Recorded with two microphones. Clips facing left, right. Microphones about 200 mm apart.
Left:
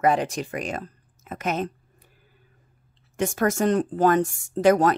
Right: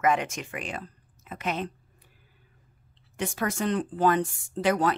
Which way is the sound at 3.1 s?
45° left (ahead or behind).